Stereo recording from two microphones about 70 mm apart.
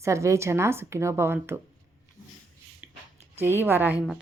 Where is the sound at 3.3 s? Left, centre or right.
Right.